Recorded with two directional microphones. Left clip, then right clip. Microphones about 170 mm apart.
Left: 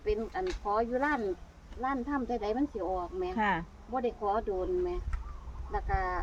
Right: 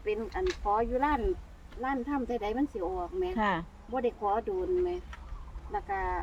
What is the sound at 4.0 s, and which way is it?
Speech, 5° left (ahead or behind).